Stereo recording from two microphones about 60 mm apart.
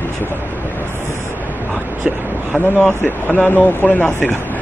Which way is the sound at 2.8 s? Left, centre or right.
Left.